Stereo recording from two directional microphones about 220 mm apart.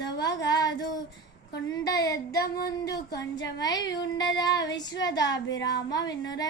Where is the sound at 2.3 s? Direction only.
45° left (ahead or behind).